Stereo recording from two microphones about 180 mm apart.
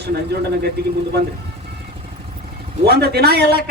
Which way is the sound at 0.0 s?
65° right (ahead or behind).